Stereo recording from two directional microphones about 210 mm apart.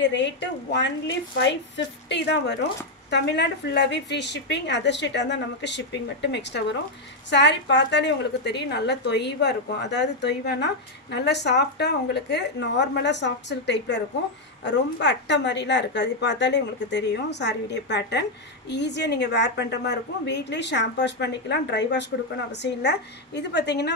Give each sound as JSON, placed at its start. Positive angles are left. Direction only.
{"t": 0.0, "sound": "a woman's voice", "side_deg": 60}